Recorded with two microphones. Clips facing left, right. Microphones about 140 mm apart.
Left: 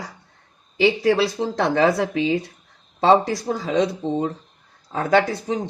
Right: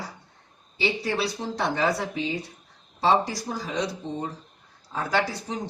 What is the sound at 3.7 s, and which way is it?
Speech, 90° left.